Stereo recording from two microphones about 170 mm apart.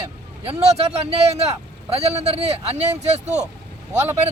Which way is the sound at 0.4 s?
40° right (ahead or behind).